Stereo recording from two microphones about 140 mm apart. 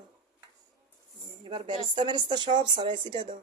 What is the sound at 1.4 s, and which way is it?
Speech, 35° right (ahead or behind).